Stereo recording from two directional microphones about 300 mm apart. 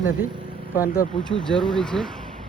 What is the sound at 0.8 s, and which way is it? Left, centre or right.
Speech, centre.